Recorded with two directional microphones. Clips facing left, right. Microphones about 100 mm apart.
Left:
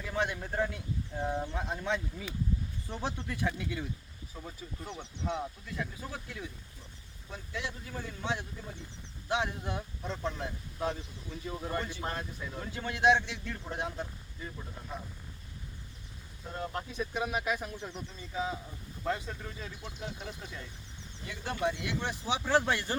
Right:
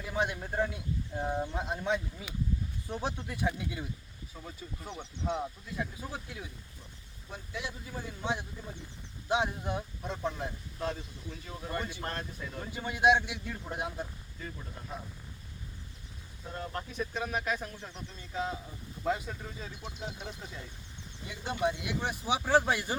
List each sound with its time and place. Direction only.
0.0 s a sound: 15° right (ahead or behind)
0.3 s speech: 10° right (ahead or behind)
4.4 s speech: centre (ahead or behind); by 10.5 s 15° right (ahead or behind)
10.8 s speech: 10° left (ahead or behind)
11.8 s speech: 15° right (ahead or behind)
12.0 s speech: 5° left (ahead or behind)
12.6 s speech: 15° right (ahead or behind)
16.6 s speech: 10° left (ahead or behind)
19.0 s speech: 15° right (ahead or behind)
21.2 s speech: 20° right (ahead or behind)